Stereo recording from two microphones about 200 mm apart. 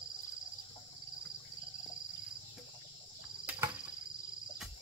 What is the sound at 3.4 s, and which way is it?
Cricket, 5° right (ahead or behind).